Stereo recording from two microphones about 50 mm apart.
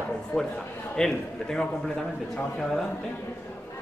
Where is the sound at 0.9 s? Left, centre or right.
Centre.